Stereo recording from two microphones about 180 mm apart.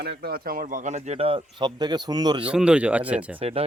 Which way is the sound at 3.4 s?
35° right (ahead or behind).